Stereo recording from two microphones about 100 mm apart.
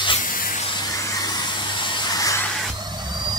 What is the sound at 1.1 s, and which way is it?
Vacuum cleaner, 45° left (ahead or behind).